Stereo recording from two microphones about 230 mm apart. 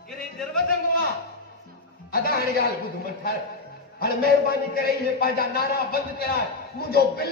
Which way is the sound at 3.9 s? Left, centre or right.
Left.